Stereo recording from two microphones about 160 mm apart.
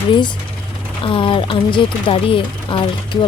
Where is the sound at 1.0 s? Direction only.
30° left (ahead or behind).